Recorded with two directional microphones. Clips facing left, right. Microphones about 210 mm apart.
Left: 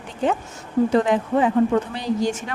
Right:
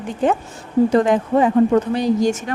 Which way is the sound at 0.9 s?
45° right (ahead or behind).